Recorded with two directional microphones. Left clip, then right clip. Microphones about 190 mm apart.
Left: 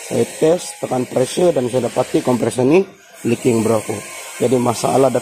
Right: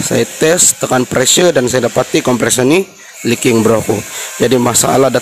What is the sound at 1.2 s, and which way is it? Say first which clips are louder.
Speech: right 4 dB; 20° right (ahead or behind).